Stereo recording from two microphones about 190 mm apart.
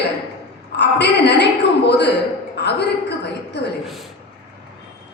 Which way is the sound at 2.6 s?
65° left (ahead or behind).